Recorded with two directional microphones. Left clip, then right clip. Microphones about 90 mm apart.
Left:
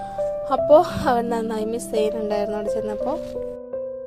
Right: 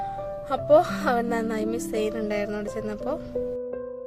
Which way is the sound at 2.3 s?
20° left (ahead or behind).